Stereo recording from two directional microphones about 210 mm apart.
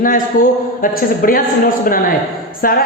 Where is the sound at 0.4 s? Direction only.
40° left (ahead or behind).